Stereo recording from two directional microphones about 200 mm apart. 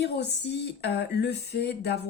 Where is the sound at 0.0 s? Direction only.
60° left (ahead or behind).